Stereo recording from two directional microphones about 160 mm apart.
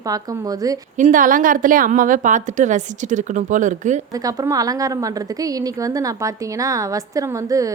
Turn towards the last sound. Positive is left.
turn(degrees=-20)  # may be behind; listen again after turning